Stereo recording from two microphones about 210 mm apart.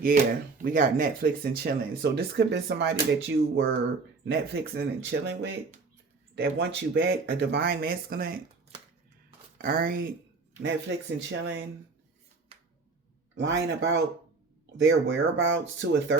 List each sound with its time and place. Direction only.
0.6 s speech: 40° right (ahead or behind)
9.6 s speech: 45° right (ahead or behind)
10.6 s speech: 60° right (ahead or behind)
13.4 s a man's voice: 15° right (ahead or behind)
14.8 s speech: 60° right (ahead or behind)